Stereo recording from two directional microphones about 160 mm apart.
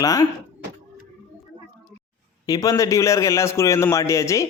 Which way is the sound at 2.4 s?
20° left (ahead or behind).